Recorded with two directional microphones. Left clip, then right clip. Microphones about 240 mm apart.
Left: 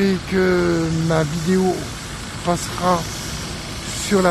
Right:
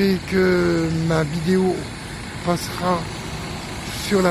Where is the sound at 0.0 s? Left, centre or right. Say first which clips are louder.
Even; centre.